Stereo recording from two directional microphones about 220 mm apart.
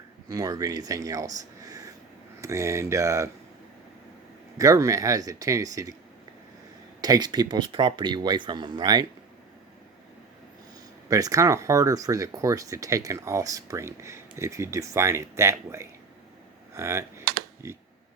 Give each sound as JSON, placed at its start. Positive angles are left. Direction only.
{"t": 0.3, "sound": "speech", "side_deg": -15}
{"t": 4.5, "sound": "speech", "side_deg": -15}
{"t": 7.0, "sound": "speech", "side_deg": -20}
{"t": 11.1, "sound": "speech", "side_deg": -15}